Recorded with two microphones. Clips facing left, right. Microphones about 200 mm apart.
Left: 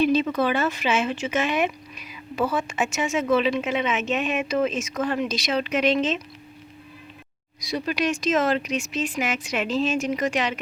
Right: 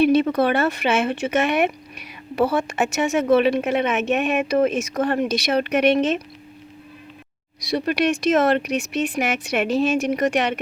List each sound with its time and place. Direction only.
0.0 s a woman's voice: 60° right (ahead or behind)
7.6 s a woman's voice: 65° right (ahead or behind)